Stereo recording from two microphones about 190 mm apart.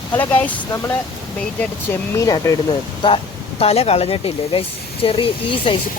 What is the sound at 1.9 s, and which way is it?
Speech, 15° left (ahead or behind).